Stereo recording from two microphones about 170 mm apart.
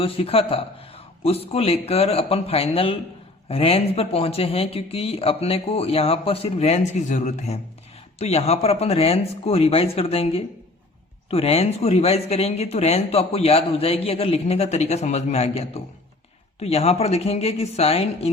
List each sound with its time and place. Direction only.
0.0 s speech: 35° left (ahead or behind)